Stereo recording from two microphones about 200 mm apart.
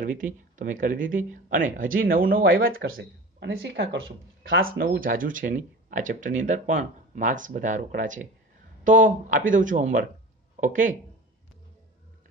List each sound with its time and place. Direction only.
0.0 s speech: 40° right (ahead or behind)
2.9 s speech: 65° right (ahead or behind); by 11.0 s 40° right (ahead or behind)